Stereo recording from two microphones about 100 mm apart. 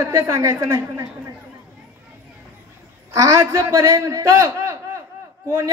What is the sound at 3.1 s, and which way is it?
A man's voice, 35° right (ahead or behind).